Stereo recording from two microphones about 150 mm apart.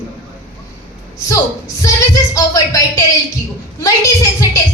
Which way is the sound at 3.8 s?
20° left (ahead or behind).